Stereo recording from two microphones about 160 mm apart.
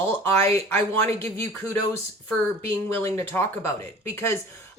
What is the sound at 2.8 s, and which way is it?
A woman's voice, 15° left (ahead or behind).